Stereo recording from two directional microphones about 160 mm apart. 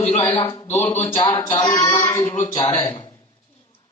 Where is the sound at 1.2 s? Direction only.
20° left (ahead or behind).